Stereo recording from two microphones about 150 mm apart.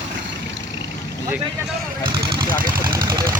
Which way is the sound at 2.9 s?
20° right (ahead or behind).